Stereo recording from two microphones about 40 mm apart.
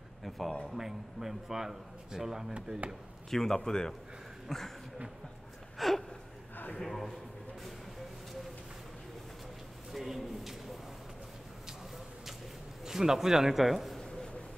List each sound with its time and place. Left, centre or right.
0.7 s a man's voice: centre
2.5 s speech: right
3.3 s speech: centre
5.8 s gasp: centre
6.8 s a man's voice: centre
9.9 s a sound: centre
12.8 s a man's voice: centre